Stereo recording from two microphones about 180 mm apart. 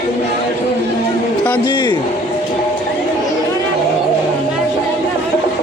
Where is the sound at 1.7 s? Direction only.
25° left (ahead or behind).